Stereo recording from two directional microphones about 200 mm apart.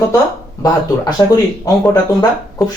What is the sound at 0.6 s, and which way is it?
Speech, 20° left (ahead or behind).